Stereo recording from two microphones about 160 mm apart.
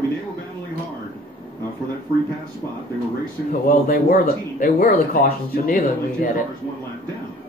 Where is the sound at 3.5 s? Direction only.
65° left (ahead or behind).